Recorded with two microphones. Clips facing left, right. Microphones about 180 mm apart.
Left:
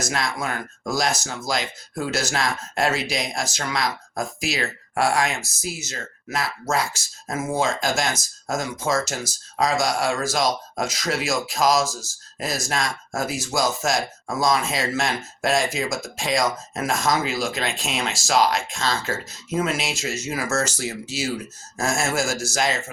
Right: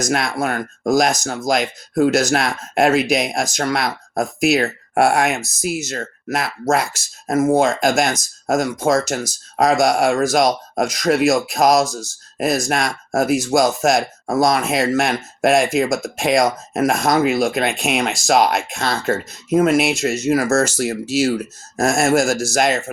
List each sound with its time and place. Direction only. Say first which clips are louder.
0.1 s speech: right 7 dB; 60° right (ahead or behind)